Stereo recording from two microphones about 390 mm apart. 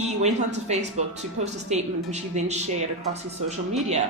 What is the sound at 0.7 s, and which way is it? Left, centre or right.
Speech, centre.